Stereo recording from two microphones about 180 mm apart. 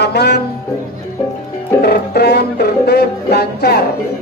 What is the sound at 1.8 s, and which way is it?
Music, 65° left (ahead or behind).